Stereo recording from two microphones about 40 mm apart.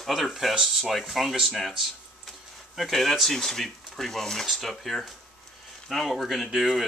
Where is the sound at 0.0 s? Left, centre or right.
Centre.